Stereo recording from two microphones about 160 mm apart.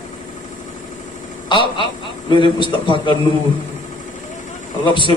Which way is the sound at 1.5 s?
30° left (ahead or behind).